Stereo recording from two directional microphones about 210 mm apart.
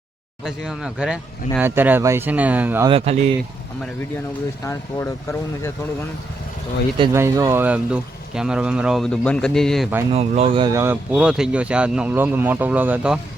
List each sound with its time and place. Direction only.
0.4 s speech: 5° right (ahead or behind)
2.9 s speech: 30° right (ahead or behind)
4.6 s speech: 15° left (ahead or behind)
7.1 s speech: 15° right (ahead or behind); by 9.9 s centre (ahead or behind)
10.1 s speech: 30° right (ahead or behind); by 13.1 s 5° right (ahead or behind)